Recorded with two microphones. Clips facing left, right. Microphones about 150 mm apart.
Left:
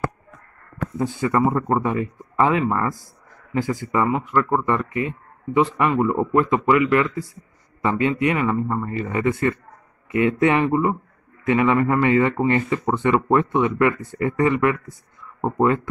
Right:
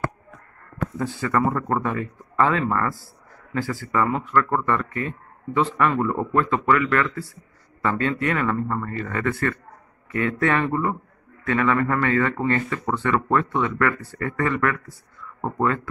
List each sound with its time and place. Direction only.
0.9 s speech: 15° left (ahead or behind)